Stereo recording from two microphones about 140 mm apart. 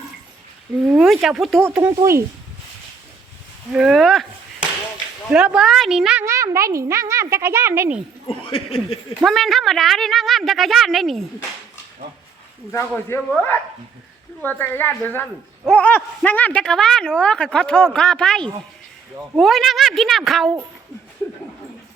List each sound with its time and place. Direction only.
0.8 s speech: 5° right (ahead or behind)
1.6 s speech: 20° right (ahead or behind)
3.7 s speech: 5° right (ahead or behind)
5.3 s speech: 5° right (ahead or behind)
6.2 s speech: 20° right (ahead or behind)
8.3 s speech: 40° left (ahead or behind)
9.2 s speech: centre (ahead or behind)
13.1 s a woman's voice: 10° left (ahead or behind)